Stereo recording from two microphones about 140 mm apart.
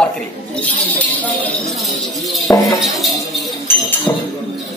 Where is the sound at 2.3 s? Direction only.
Centre (ahead or behind).